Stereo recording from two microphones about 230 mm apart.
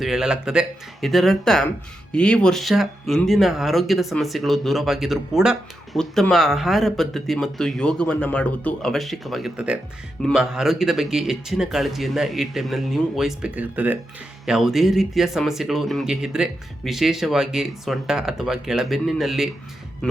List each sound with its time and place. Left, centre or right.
0.0 s speech: centre